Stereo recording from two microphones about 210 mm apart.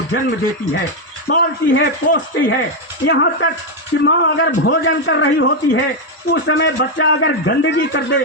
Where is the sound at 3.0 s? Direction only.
60° left (ahead or behind).